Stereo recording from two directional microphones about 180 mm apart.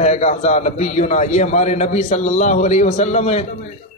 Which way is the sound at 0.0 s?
40° left (ahead or behind).